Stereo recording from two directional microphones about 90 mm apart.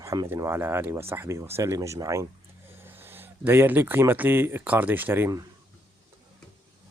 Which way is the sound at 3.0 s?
25° right (ahead or behind).